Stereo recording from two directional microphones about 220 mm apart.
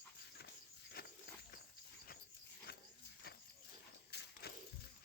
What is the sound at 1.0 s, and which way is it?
Walk, 45° left (ahead or behind).